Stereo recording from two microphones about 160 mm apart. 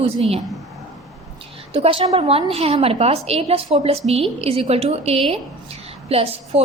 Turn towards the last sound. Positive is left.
turn(degrees=-40)  # may be behind; listen again after turning